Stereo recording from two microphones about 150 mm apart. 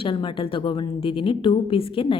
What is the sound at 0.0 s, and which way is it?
A woman's voice, 35° left (ahead or behind).